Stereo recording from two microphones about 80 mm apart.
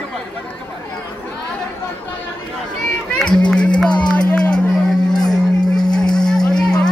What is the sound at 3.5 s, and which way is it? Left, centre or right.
Music, centre.